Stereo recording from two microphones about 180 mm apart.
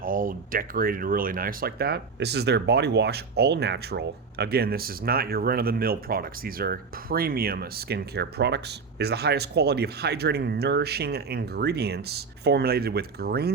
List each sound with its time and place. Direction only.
0.0 s speech: 50° right (ahead or behind)